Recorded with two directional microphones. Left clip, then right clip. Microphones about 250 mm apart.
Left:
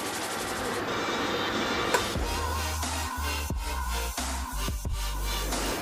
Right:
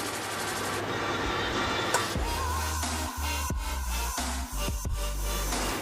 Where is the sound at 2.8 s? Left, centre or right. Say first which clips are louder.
Left 1 dB; centre.